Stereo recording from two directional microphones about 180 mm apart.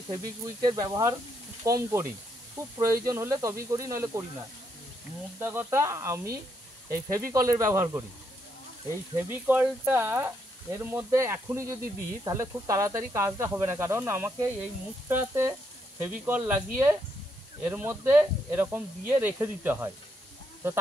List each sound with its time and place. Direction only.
0.1 s speech: 20° right (ahead or behind)
5.4 s speech: 10° right (ahead or behind)
9.1 s speech: 10° right (ahead or behind)